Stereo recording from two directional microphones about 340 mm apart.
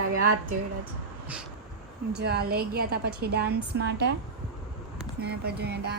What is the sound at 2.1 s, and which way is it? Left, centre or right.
A woman's voice, right.